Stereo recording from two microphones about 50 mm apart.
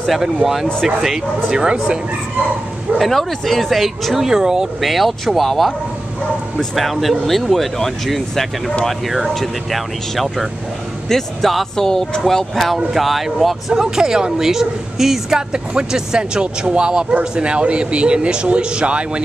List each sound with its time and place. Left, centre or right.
0.2 s speech: centre
3.0 s speech: centre
4.8 s speech: centre; by 19.2 s right